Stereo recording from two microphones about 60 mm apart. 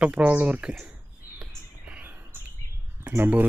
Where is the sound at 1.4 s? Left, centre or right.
Centre.